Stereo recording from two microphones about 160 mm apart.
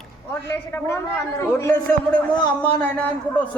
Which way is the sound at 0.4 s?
15° left (ahead or behind).